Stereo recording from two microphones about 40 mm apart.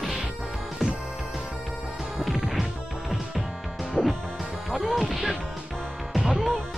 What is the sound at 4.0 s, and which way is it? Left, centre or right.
Music, centre.